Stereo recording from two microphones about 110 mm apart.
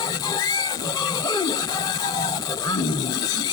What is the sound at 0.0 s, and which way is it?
Music, 35° left (ahead or behind).